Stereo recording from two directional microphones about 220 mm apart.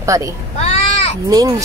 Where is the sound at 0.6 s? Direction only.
30° left (ahead or behind).